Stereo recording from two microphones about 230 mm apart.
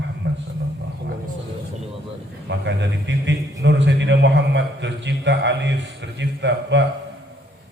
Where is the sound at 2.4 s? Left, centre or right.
Right.